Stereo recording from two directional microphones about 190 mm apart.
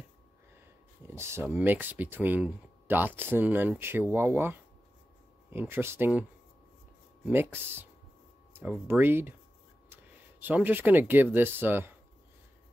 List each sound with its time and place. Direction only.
1.0 s speech: 15° right (ahead or behind)
7.2 s speech: 10° right (ahead or behind)
10.4 s speech: 10° right (ahead or behind)